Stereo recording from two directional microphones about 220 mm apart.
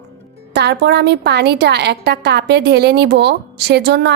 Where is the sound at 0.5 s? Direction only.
50° right (ahead or behind).